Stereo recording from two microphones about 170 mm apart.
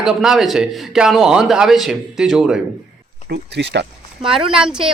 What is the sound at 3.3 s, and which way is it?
Speech, 90° right.